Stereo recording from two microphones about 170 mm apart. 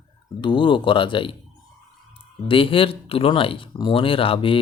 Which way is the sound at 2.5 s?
30° left (ahead or behind).